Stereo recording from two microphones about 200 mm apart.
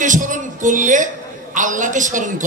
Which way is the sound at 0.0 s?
40° right (ahead or behind).